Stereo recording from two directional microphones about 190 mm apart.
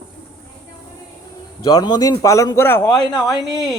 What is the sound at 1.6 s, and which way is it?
A man's voice, 20° left (ahead or behind).